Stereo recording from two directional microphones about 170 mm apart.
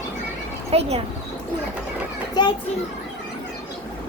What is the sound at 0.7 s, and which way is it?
Speech, 35° right (ahead or behind).